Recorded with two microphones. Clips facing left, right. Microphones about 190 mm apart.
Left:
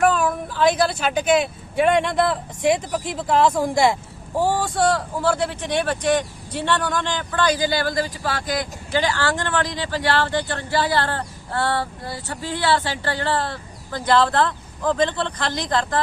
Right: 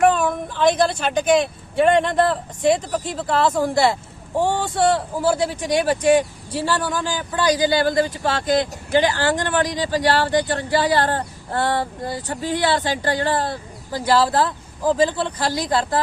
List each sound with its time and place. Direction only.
0.0 s speech: centre (ahead or behind); by 7.8 s 15° right (ahead or behind)
8.2 s speech: 25° right (ahead or behind); by 16.0 s 10° right (ahead or behind)